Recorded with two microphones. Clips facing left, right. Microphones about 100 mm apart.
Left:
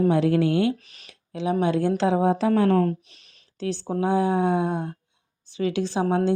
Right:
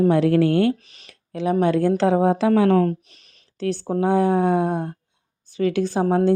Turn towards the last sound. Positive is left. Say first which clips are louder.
# right 3 dB
turn(degrees=-45)  # may be behind; listen again after turning